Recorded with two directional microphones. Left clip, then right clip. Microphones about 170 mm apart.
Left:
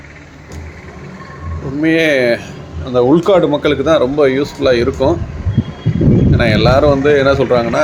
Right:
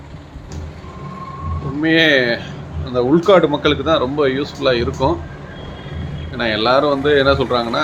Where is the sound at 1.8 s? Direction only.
10° left (ahead or behind).